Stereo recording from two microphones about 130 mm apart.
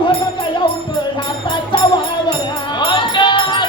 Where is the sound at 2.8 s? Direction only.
40° left (ahead or behind).